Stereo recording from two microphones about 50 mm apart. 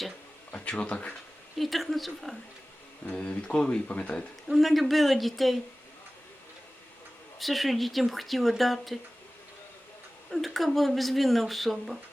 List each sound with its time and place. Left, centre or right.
0.5 s speech: left
1.5 s speech: centre
3.1 s speech: left
4.4 s speech: centre
7.3 s speech: centre
10.3 s speech: centre